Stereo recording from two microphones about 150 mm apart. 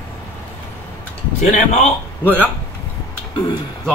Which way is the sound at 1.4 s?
50° left (ahead or behind).